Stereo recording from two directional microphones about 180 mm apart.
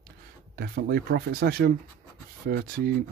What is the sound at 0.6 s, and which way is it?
Speech, 60° right (ahead or behind).